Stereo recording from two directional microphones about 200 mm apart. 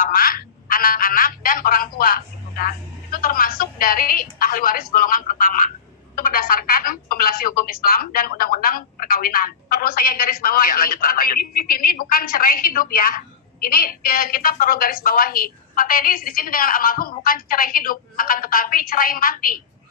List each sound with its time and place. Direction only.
0.0 s a woman's voice: 45° left (ahead or behind)